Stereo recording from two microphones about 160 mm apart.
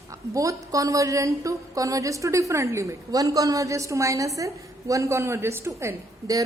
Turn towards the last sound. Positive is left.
turn(degrees=-20)  # may be behind; listen again after turning